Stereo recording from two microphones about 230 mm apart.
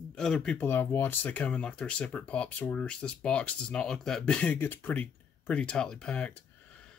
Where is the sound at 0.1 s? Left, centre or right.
Centre.